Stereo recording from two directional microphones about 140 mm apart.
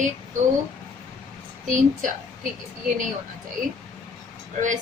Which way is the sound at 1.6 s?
65° right (ahead or behind).